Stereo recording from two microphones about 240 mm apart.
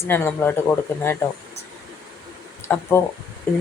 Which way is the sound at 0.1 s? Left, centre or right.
Centre.